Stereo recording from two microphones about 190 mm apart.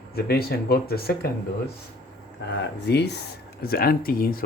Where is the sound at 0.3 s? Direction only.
55° left (ahead or behind).